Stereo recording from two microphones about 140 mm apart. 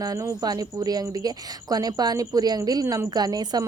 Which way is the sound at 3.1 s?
30° right (ahead or behind).